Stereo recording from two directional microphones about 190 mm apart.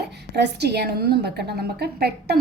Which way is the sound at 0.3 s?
60° right (ahead or behind).